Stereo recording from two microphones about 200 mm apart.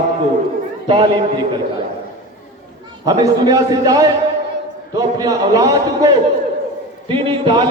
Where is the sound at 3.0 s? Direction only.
20° right (ahead or behind).